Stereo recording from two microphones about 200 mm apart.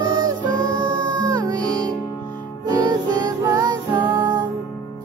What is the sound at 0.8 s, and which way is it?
Music, 20° right (ahead or behind).